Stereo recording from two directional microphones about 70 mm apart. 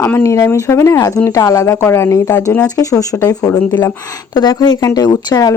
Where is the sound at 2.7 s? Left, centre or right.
Left.